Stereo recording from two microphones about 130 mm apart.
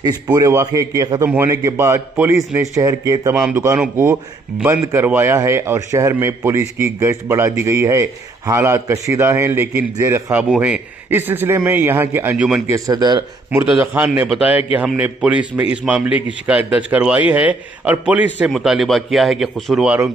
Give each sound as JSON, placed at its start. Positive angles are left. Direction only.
{"t": 0.3, "sound": "a man's voice", "side_deg": -25}
{"t": 3.3, "sound": "a man's voice", "side_deg": -5}
{"t": 3.9, "sound": "a man's voice", "side_deg": -15}
{"t": 10.3, "sound": "a man's voice", "side_deg": -10}
{"t": 13.7, "sound": "a man's voice", "side_deg": -15}